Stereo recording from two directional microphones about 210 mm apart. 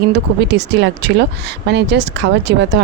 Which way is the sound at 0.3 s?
55° right (ahead or behind).